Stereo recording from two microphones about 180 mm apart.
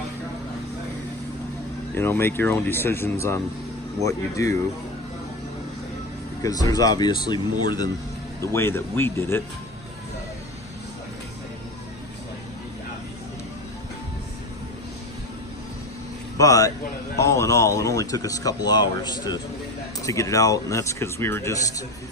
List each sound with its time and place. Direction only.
2.0 s speech: 15° left (ahead or behind)
6.4 s speech: 20° left (ahead or behind)
16.3 s a man's voice: 20° left (ahead or behind)